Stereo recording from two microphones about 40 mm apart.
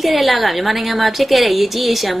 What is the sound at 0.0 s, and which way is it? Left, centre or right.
A woman's voice, centre.